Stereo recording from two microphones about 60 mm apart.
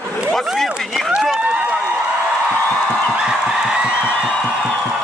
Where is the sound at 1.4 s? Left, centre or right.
Right.